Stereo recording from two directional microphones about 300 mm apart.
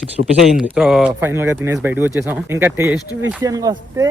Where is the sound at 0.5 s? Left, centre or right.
Centre.